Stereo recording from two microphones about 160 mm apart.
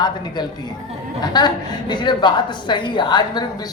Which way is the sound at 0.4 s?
25° left (ahead or behind).